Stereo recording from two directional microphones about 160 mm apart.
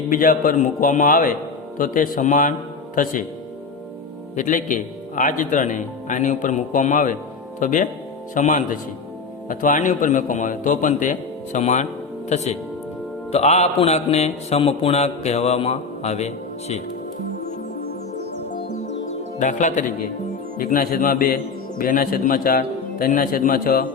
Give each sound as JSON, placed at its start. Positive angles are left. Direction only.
{"t": 0.1, "sound": "a man's voice", "side_deg": 60}
{"t": 4.4, "sound": "speech", "side_deg": 50}
{"t": 13.3, "sound": "mantra", "side_deg": 45}
{"t": 19.4, "sound": "a man's voice", "side_deg": 50}